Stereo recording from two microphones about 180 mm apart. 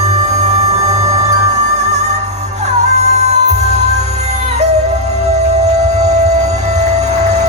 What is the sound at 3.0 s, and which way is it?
Music, 40° right (ahead or behind).